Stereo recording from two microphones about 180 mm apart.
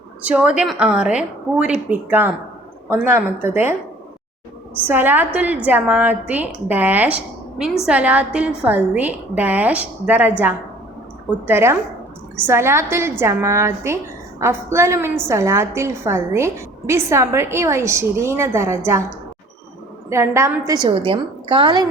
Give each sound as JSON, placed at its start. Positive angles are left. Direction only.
{"t": 0.3, "sound": "a woman's voice", "side_deg": -5}
{"t": 4.9, "sound": "a woman's voice", "side_deg": -10}
{"t": 11.4, "sound": "a woman's voice", "side_deg": -15}
{"t": 20.1, "sound": "a woman's voice", "side_deg": -15}